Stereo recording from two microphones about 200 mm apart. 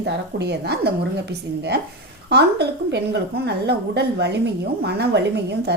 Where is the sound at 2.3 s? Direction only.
55° right (ahead or behind).